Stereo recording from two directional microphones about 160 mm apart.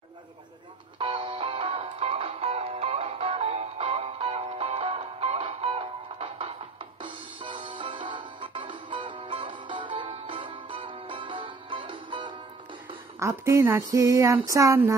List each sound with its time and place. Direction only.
0.9 s music: 30° right (ahead or behind)
13.2 s a woman's voice: 20° right (ahead or behind)
13.9 s a sound: 20° right (ahead or behind)